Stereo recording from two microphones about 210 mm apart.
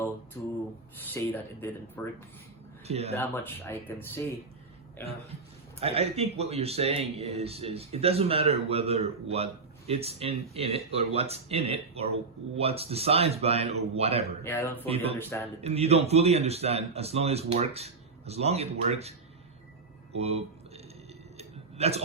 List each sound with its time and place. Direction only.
0.4 s speech: 10° left (ahead or behind)
2.8 s speech: 30° right (ahead or behind)
3.2 s speech: 10° left (ahead or behind)
5.8 s speech: 30° right (ahead or behind)
14.4 s speech: 10° left (ahead or behind)
14.8 s speech: 30° right (ahead or behind)
15.2 s speech: 10° left (ahead or behind)
15.6 s speech: 30° right (ahead or behind)
20.1 s a sound: 30° right (ahead or behind)